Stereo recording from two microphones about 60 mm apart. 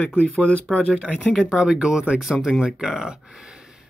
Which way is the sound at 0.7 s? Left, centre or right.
Centre.